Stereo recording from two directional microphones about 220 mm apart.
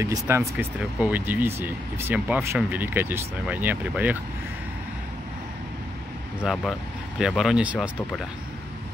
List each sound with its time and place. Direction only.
0.0 s speech: 15° right (ahead or behind)
6.4 s speech: centre (ahead or behind)